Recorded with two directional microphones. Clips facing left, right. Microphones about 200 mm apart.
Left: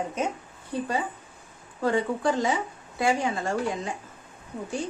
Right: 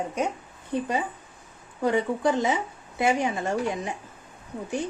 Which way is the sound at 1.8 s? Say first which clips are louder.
Right 1 dB; 20° right (ahead or behind).